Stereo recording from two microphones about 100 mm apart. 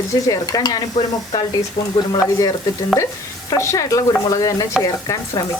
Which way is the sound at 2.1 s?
40° left (ahead or behind).